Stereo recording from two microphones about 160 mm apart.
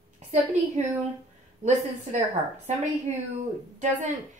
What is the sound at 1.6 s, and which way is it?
A woman's voice, 45° right (ahead or behind).